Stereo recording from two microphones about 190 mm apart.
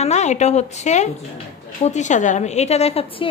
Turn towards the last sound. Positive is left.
turn(degrees=30)  # may be behind; listen again after turning